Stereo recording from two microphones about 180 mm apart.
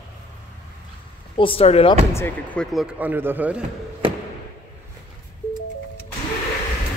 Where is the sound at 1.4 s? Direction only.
30° left (ahead or behind).